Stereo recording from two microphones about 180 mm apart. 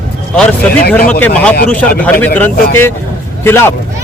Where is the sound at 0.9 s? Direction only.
10° left (ahead or behind).